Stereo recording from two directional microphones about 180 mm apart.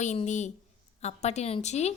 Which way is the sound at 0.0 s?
40° left (ahead or behind).